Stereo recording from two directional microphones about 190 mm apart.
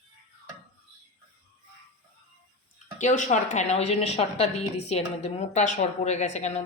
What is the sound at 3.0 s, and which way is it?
A woman's voice, 40° left (ahead or behind).